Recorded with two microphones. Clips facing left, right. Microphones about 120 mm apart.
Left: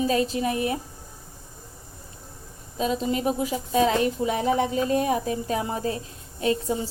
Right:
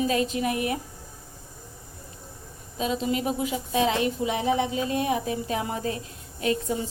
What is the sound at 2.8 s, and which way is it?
A woman's voice, 40° left (ahead or behind).